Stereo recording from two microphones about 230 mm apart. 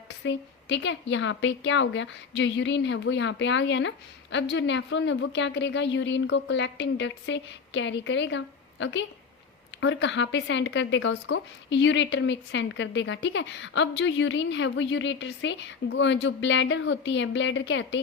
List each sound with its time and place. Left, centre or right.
0.2 s a woman's voice: left